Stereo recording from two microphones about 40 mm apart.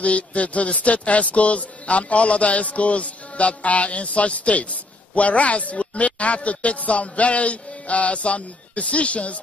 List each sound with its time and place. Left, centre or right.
0.0 s speech: left